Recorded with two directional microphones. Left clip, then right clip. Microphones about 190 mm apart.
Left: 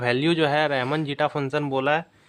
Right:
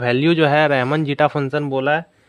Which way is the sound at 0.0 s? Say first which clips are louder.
Right 5 dB; 30° right (ahead or behind).